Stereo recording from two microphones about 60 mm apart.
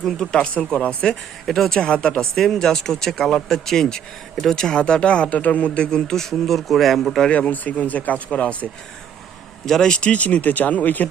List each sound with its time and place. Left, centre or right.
0.0 s a man's voice: centre
1.5 s a man's voice: centre
2.3 s a man's voice: centre
7.3 s speech: left
9.6 s speech: centre; by 11.1 s left